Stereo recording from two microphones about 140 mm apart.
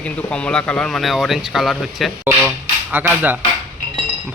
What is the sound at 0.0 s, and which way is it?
Speech, 10° left (ahead or behind).